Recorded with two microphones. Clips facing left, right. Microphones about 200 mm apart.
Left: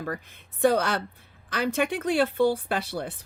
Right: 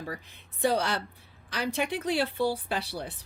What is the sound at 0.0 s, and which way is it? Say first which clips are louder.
Speech: left 5 dB; 55° left (ahead or behind).